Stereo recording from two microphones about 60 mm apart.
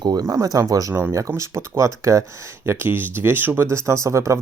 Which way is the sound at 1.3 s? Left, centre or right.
Right.